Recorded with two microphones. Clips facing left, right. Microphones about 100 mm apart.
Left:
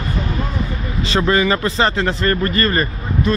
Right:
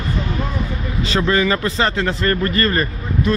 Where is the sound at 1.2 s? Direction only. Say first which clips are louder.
Left 1 dB; 10° left (ahead or behind).